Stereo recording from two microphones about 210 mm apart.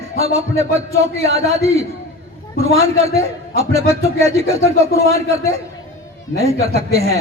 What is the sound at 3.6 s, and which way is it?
Speech, 30° right (ahead or behind).